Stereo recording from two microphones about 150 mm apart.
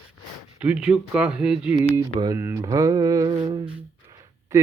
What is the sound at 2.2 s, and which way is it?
Mantra, 20° right (ahead or behind).